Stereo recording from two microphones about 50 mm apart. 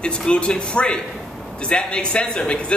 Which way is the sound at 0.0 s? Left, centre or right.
Centre.